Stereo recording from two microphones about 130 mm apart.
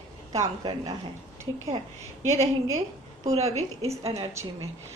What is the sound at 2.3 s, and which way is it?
A woman's voice, 60° right (ahead or behind).